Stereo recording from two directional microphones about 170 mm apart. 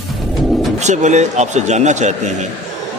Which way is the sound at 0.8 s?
45° right (ahead or behind).